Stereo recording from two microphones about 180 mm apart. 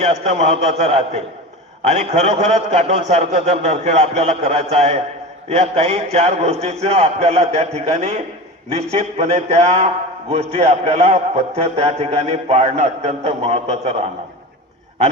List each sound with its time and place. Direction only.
0.0 s a man's voice: 40° right (ahead or behind)